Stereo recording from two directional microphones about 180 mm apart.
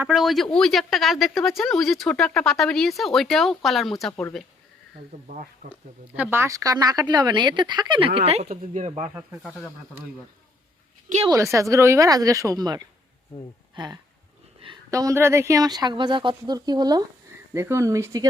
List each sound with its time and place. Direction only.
0.0 s speech: centre (ahead or behind)
5.6 s speech: 50° right (ahead or behind)
6.1 s speech: 15° right (ahead or behind); by 9.1 s 40° right (ahead or behind)
11.5 s speech: 15° right (ahead or behind)